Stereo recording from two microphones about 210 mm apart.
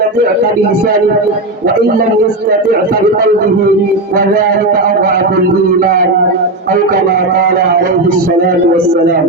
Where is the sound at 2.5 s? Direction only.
40° right (ahead or behind).